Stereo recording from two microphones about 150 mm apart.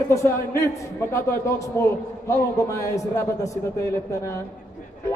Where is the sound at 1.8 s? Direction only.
20° left (ahead or behind).